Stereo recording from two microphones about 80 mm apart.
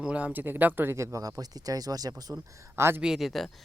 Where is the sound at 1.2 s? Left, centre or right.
Right.